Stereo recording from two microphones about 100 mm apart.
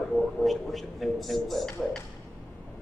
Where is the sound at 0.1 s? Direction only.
Centre (ahead or behind).